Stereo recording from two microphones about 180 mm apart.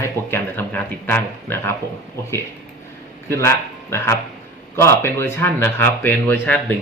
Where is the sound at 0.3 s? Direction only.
10° left (ahead or behind).